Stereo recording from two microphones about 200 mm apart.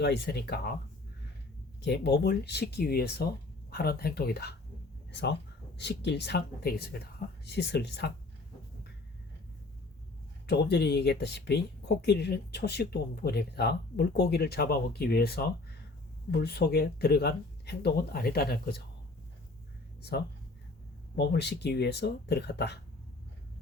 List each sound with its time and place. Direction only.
0.0 s speech: 55° left (ahead or behind)
1.8 s speech: 55° left (ahead or behind)
10.4 s speech: 55° left (ahead or behind)
20.0 s speech: 55° left (ahead or behind)